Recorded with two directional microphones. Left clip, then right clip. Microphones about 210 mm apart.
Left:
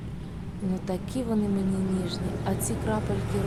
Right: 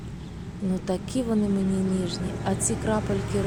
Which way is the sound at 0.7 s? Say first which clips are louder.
Right 4 dB; 10° right (ahead or behind).